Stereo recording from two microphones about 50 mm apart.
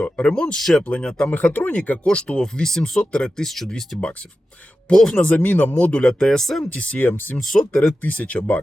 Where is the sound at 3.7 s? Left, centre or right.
Centre.